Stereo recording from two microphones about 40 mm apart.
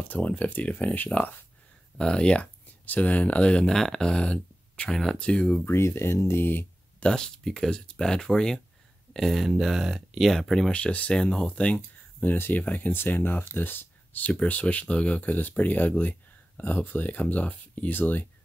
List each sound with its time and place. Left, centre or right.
0.2 s speech: left
2.0 s speech: left
2.8 s speech: left
3.6 s speech: centre
4.1 s speech: left
5.7 s speech: left
7.0 s speech: centre
9.1 s speech: centre
10.7 s speech: left
12.3 s speech: left
12.5 s speech: left
13.0 s speech: left